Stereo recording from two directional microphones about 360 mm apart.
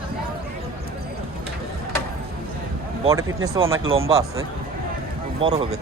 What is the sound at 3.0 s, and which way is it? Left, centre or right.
Speech, centre.